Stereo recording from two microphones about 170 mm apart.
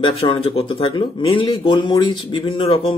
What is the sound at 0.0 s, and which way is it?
Speech, 30° left (ahead or behind).